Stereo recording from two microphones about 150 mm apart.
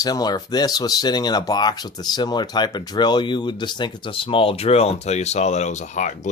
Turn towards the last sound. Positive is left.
turn(degrees=50)  # may be behind; listen again after turning